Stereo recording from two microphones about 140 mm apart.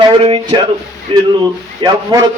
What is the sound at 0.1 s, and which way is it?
A man's voice, 40° right (ahead or behind).